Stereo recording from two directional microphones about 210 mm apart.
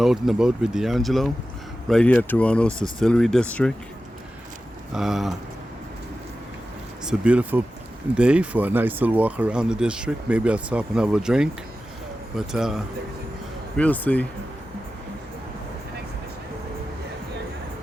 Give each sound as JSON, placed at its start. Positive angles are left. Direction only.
{"t": 0.0, "sound": "speech", "side_deg": 0}
{"t": 4.9, "sound": "speech", "side_deg": 0}
{"t": 7.0, "sound": "speech", "side_deg": -5}